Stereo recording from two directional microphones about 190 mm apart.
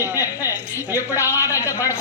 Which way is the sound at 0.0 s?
10° right (ahead or behind).